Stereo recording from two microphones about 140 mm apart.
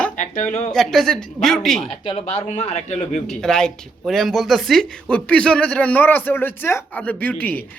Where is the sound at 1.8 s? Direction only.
40° left (ahead or behind).